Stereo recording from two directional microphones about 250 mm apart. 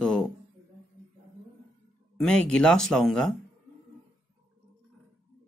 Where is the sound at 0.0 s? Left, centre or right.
Centre.